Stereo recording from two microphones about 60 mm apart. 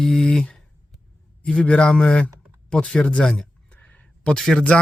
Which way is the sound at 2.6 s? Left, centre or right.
Centre.